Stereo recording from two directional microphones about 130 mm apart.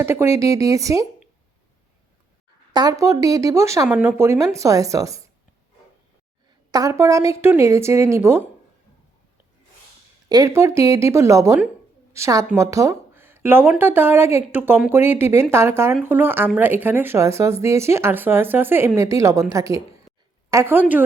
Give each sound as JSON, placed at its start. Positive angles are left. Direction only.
{"t": 0.0, "sound": "speech", "side_deg": -20}
{"t": 2.7, "sound": "speech", "side_deg": -25}
{"t": 6.7, "sound": "speech", "side_deg": -30}
{"t": 10.2, "sound": "speech", "side_deg": -25}